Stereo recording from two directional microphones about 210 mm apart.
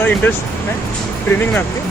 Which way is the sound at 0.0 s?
10° left (ahead or behind).